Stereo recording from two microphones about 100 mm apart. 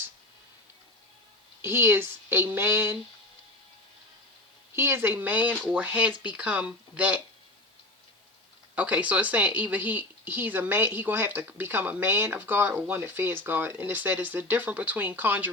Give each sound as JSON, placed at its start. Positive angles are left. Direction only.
{"t": 1.6, "sound": "speech", "side_deg": -25}
{"t": 4.7, "sound": "speech", "side_deg": -25}
{"t": 8.7, "sound": "speech", "side_deg": -15}